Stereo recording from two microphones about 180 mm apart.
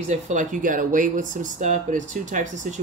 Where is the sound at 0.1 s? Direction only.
45° right (ahead or behind).